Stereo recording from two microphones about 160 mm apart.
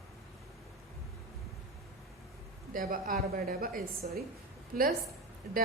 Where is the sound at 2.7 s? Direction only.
60° right (ahead or behind).